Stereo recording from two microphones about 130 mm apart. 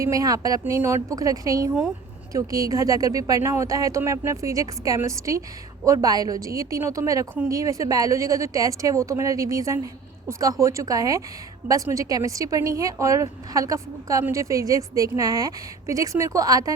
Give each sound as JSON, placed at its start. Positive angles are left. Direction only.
{"t": 0.0, "sound": "a woman's voice", "side_deg": -25}